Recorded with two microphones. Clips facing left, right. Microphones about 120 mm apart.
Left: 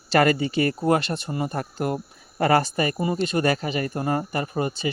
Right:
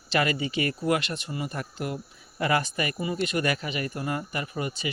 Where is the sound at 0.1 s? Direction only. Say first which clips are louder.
Left 7 dB; 45° left (ahead or behind).